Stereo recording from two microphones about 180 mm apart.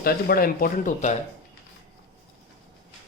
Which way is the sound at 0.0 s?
55° left (ahead or behind).